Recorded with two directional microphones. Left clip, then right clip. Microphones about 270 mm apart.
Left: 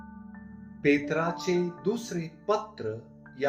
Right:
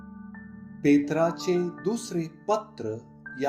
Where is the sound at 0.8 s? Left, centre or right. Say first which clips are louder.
Right 3 dB; right.